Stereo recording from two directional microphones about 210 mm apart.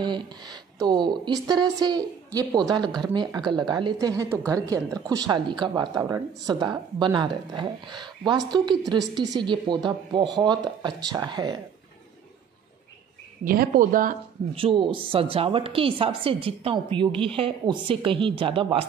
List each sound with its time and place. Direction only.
0.0 s a woman's voice: 20° right (ahead or behind)
13.4 s speech: 40° right (ahead or behind)
14.5 s a woman's voice: 25° right (ahead or behind)